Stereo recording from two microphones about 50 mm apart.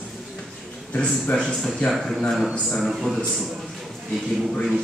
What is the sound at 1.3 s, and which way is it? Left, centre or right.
Speech, centre.